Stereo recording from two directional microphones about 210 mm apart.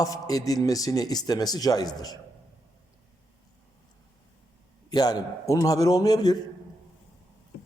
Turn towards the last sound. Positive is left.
turn(degrees=20)  # may be behind; listen again after turning